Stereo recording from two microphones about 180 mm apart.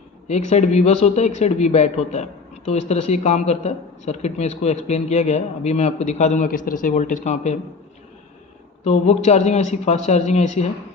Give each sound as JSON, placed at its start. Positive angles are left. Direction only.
{"t": 0.3, "sound": "speech", "side_deg": 40}
{"t": 8.8, "sound": "speech", "side_deg": 35}